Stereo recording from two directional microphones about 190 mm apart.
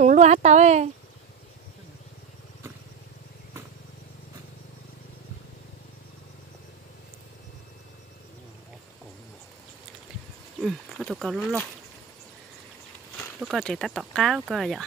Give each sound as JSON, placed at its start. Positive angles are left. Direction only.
{"t": 0.0, "sound": "speech", "side_deg": -40}
{"t": 10.6, "sound": "speech", "side_deg": 0}
{"t": 13.4, "sound": "speech", "side_deg": 0}